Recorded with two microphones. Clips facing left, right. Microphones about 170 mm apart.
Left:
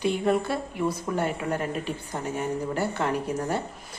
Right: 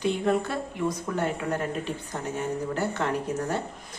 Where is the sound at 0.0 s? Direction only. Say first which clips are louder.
Left 1 dB; 10° left (ahead or behind).